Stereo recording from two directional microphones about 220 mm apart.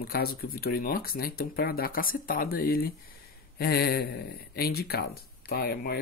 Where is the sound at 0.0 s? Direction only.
45° left (ahead or behind).